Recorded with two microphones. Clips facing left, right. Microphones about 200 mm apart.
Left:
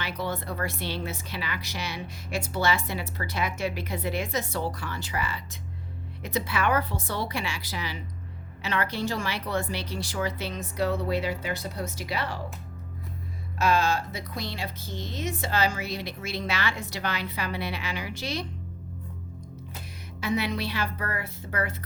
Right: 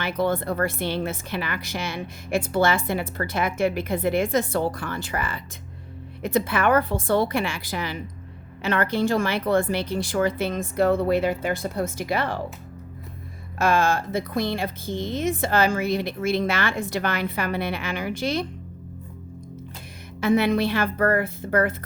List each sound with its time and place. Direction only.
0.0 s speech: 50° right (ahead or behind)
13.6 s speech: 50° right (ahead or behind)
20.2 s speech: 50° right (ahead or behind)